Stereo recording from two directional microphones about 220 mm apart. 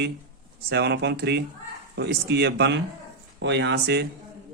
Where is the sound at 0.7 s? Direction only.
50° right (ahead or behind).